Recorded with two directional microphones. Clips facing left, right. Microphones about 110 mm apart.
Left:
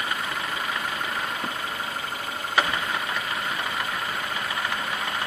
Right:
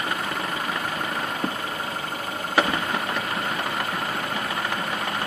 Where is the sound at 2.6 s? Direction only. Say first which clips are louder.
Right 3 dB; 45° right (ahead or behind).